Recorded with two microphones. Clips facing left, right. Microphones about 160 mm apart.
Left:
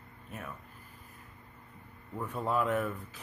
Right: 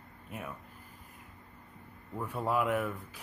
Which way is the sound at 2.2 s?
10° right (ahead or behind).